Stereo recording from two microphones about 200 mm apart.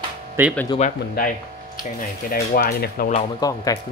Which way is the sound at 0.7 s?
40° left (ahead or behind).